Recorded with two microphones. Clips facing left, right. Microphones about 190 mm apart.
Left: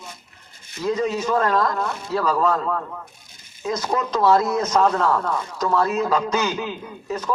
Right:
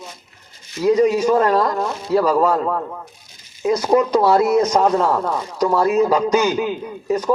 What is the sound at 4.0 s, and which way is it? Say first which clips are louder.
A man's voice: right 1 dB; 10° right (ahead or behind).